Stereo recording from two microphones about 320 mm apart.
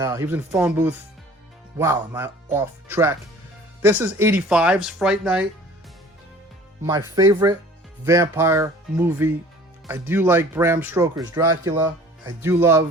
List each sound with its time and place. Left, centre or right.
0.0 s speech: centre
6.8 s speech: centre